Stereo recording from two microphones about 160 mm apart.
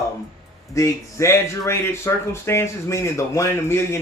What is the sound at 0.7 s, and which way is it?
Speech, 20° left (ahead or behind).